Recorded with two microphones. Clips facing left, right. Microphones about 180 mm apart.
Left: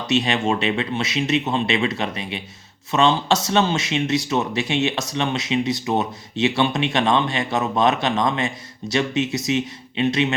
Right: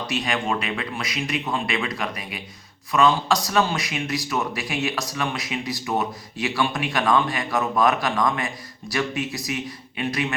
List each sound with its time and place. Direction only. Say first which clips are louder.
0.1 s speech: left 6 dB; 25° left (ahead or behind)